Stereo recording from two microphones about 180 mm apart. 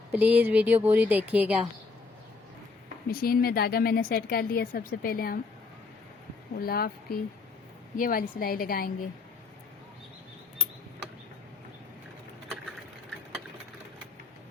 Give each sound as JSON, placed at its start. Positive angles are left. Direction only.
{"t": 0.1, "sound": "a woman's voice", "side_deg": -10}
{"t": 3.1, "sound": "speech", "side_deg": 55}
{"t": 6.5, "sound": "a woman's voice", "side_deg": 55}